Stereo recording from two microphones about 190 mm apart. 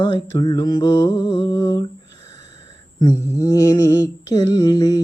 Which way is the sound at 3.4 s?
20° left (ahead or behind).